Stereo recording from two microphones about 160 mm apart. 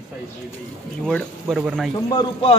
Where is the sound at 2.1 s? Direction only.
25° left (ahead or behind).